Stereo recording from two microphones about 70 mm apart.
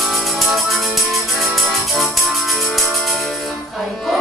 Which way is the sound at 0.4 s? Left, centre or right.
Centre.